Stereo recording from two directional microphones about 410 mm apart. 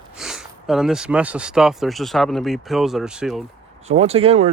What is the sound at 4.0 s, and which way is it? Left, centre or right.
Speech, centre.